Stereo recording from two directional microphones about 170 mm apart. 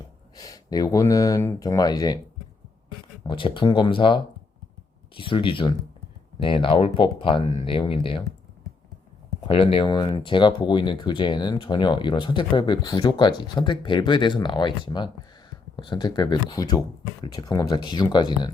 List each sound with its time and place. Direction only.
0.3 s speech: 20° left (ahead or behind)
3.2 s speech: 30° left (ahead or behind)
9.5 s speech: 35° left (ahead or behind)